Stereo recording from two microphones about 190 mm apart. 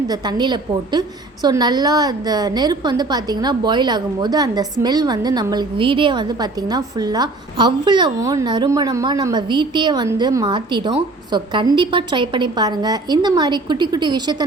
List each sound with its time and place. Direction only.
0.1 s a woman's voice: 25° right (ahead or behind)